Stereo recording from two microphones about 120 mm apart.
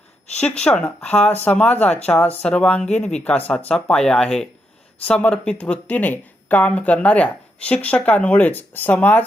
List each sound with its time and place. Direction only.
0.3 s speech: 10° left (ahead or behind)
2.8 s speech: 70° left (ahead or behind)
3.2 s speech: 10° left (ahead or behind)